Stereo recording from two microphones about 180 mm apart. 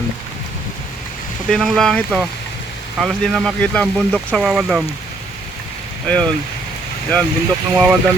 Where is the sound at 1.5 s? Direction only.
Centre (ahead or behind).